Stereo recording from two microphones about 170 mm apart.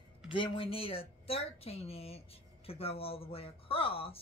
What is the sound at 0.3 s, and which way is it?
A woman's voice, 30° left (ahead or behind).